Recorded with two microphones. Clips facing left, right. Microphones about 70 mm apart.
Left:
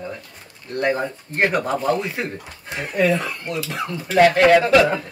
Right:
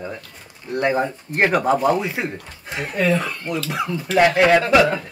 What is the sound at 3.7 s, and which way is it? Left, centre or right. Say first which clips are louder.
Speech: right 3 dB; centre.